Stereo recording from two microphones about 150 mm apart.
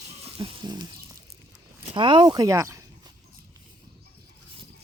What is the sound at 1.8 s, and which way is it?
Speech, 35° right (ahead or behind).